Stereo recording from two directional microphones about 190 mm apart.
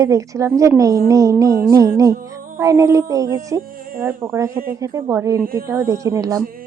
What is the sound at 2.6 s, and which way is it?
A woman's voice, 15° right (ahead or behind).